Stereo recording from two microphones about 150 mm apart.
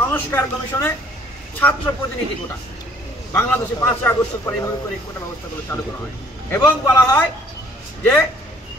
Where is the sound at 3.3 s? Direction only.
10° left (ahead or behind).